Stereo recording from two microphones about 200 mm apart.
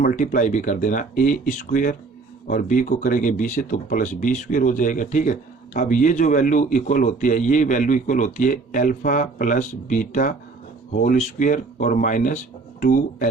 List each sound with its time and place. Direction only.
0.0 s speech: 40° left (ahead or behind)